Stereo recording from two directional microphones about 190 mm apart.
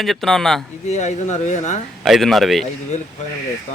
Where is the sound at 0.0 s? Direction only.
Centre (ahead or behind).